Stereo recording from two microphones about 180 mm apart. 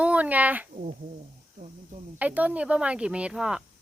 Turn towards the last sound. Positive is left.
turn(degrees=-5)  # may be behind; listen again after turning